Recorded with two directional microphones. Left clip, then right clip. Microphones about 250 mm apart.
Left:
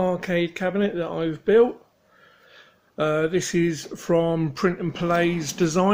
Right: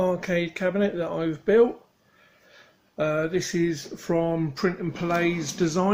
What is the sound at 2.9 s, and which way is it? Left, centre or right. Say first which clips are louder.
Speech: left 3 dB; centre.